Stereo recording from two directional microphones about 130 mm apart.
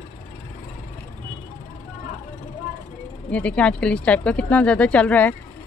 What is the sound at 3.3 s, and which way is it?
Speech, 10° left (ahead or behind).